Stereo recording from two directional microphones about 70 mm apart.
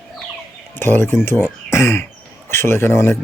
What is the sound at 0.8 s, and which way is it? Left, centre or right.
Speech, left.